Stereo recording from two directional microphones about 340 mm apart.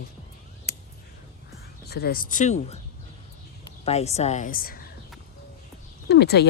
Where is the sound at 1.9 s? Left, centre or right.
Left.